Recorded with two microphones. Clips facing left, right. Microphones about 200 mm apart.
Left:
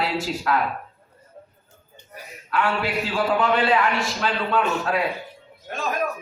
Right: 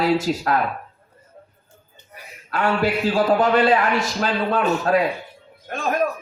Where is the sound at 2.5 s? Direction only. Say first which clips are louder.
Right 3 dB; 40° right (ahead or behind).